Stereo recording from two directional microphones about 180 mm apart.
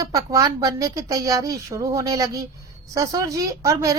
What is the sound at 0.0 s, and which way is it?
A woman's voice, 20° right (ahead or behind).